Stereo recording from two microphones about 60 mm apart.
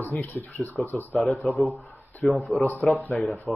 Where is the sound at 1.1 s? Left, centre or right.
Centre.